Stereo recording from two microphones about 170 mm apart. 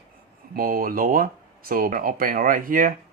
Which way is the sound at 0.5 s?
60° right (ahead or behind).